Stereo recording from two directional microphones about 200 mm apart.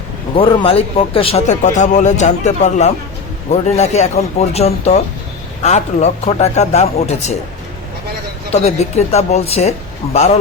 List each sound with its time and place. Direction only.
0.3 s speech: 30° left (ahead or behind)
8.5 s speech: 35° left (ahead or behind)